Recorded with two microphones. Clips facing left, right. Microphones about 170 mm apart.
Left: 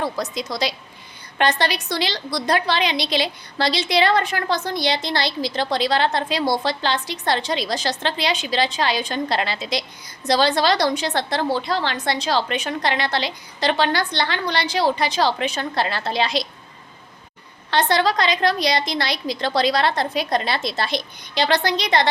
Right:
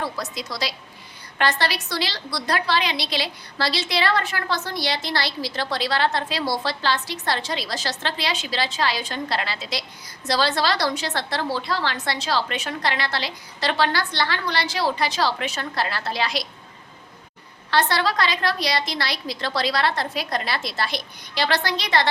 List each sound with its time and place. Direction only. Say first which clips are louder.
0.0 s a woman's voice: left 4 dB; 20° left (ahead or behind)
17.7 s a woman's voice: left 3 dB; 20° left (ahead or behind)